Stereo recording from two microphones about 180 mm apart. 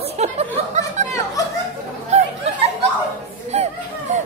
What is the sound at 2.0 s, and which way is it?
Chatter, 40° right (ahead or behind).